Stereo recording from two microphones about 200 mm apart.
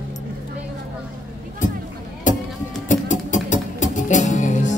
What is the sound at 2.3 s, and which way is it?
Music, 40° left (ahead or behind).